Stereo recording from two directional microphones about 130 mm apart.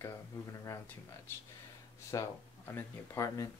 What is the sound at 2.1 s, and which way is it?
Speech, 25° left (ahead or behind).